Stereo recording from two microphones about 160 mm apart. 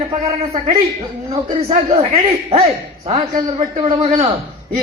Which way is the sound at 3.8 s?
30° right (ahead or behind).